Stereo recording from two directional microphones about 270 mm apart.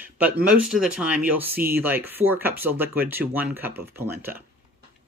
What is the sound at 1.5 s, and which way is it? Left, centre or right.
Speech, right.